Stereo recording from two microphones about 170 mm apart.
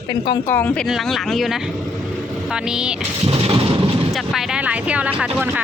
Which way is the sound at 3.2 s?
35° right (ahead or behind).